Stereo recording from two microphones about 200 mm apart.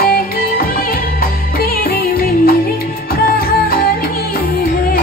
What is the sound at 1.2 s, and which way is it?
Music, 50° left (ahead or behind).